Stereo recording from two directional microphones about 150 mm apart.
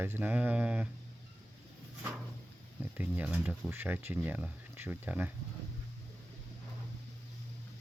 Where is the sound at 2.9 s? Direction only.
10° right (ahead or behind).